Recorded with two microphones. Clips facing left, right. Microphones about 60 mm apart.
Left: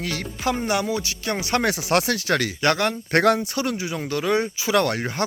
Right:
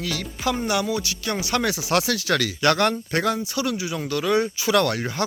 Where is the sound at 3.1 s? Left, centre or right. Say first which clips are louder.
Left 5 dB; left.